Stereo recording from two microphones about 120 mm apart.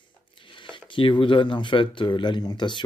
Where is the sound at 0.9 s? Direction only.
45° left (ahead or behind).